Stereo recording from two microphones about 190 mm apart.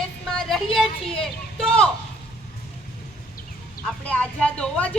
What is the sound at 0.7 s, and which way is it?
A woman's voice, 5° left (ahead or behind).